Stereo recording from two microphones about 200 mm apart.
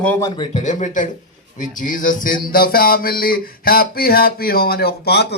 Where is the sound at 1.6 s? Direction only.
40° left (ahead or behind).